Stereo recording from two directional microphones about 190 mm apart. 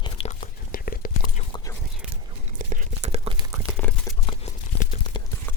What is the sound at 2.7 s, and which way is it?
Whispering, 40° right (ahead or behind).